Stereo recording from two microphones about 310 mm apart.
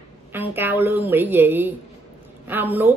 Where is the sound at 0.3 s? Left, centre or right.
Centre.